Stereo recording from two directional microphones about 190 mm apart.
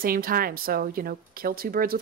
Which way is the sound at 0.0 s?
50° right (ahead or behind).